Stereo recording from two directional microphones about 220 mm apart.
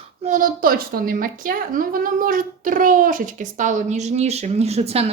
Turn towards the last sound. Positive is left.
turn(degrees=-30)  # may be behind; listen again after turning